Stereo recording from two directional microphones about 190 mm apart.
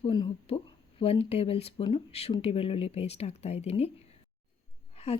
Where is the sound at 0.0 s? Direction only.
25° left (ahead or behind).